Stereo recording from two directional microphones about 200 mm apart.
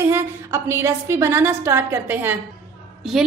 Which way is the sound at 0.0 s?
15° right (ahead or behind).